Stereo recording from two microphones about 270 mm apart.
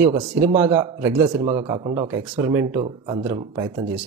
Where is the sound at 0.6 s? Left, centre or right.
Centre.